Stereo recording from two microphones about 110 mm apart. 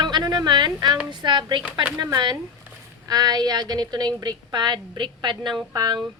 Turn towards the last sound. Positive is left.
turn(degrees=-40)  # may be behind; listen again after turning